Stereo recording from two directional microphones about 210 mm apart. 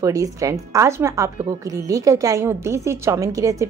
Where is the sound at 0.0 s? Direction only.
15° right (ahead or behind).